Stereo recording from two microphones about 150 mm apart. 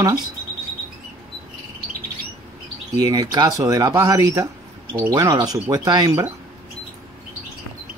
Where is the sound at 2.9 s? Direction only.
25° right (ahead or behind).